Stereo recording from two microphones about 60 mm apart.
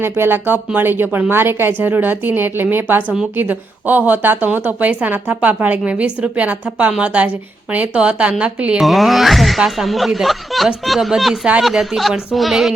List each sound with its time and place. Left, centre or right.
0.0 s speech: right
8.8 s speech: centre